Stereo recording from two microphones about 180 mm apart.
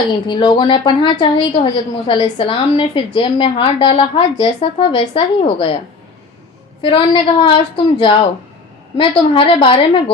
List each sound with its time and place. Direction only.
0.3 s a woman's voice: 25° left (ahead or behind)
6.8 s a woman's voice: 30° left (ahead or behind)